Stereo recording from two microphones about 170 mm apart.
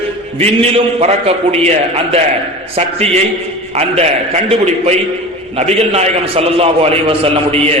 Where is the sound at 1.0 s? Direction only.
40° right (ahead or behind).